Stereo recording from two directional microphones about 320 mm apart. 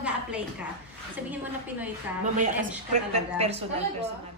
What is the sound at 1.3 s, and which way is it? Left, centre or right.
Speech, centre.